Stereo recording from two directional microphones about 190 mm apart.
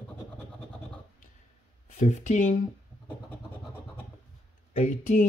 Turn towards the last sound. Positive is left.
turn(degrees=40)  # may be behind; listen again after turning